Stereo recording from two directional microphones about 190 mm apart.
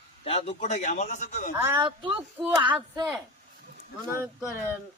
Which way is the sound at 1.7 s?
25° right (ahead or behind).